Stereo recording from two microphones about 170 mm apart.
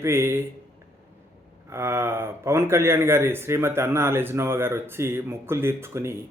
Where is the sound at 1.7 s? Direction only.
15° right (ahead or behind).